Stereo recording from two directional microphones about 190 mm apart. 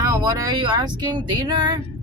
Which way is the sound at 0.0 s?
20° right (ahead or behind).